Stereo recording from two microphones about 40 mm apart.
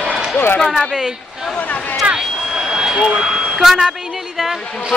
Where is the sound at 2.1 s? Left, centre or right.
Centre.